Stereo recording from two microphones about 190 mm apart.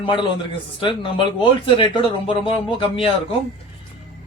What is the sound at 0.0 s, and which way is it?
Speech, 25° left (ahead or behind).